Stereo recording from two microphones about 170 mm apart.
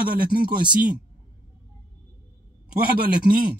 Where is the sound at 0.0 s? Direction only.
55° right (ahead or behind).